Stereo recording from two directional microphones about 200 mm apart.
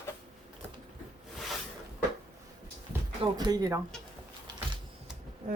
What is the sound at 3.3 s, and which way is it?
Speech, 20° right (ahead or behind).